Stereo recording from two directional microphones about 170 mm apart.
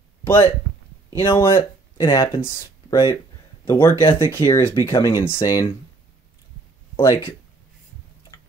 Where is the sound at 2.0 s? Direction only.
20° left (ahead or behind).